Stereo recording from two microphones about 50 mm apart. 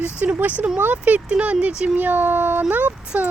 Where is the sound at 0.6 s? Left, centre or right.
Right.